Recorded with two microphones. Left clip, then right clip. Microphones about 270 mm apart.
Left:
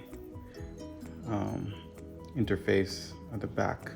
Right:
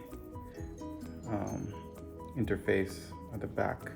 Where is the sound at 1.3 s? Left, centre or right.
Left.